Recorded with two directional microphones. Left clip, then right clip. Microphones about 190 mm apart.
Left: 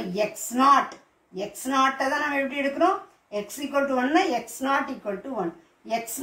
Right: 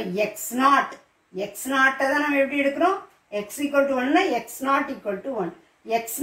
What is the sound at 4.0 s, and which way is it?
A woman's voice, 15° right (ahead or behind).